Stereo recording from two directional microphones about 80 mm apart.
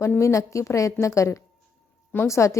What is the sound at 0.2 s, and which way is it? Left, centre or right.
A woman's voice, left.